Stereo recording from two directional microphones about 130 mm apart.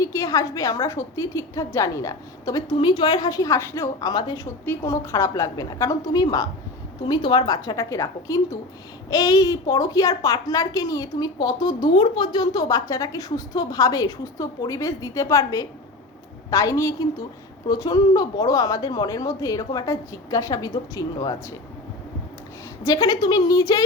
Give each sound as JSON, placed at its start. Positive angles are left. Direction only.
{"t": 0.0, "sound": "a woman's voice", "side_deg": 25}
{"t": 4.1, "sound": "a woman's voice", "side_deg": 35}
{"t": 4.6, "sound": "a woman's voice", "side_deg": 20}
{"t": 22.8, "sound": "a woman's voice", "side_deg": 25}